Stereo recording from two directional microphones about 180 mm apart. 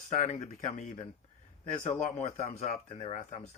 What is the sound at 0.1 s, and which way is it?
Speech, 40° left (ahead or behind).